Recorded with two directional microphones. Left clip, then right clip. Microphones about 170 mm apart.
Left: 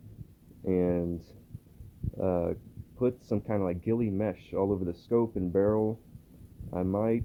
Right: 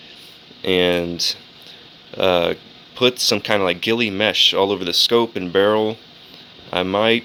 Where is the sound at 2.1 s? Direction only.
20° right (ahead or behind).